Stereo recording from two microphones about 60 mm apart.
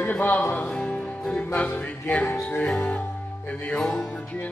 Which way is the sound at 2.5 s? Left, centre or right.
Left.